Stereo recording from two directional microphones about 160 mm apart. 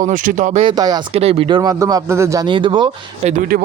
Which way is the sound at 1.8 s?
20° right (ahead or behind).